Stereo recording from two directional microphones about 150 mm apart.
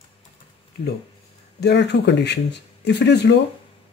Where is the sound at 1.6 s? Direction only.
90° left.